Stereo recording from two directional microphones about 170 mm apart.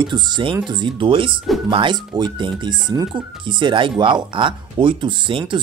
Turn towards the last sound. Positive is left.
turn(degrees=-30)  # may be behind; listen again after turning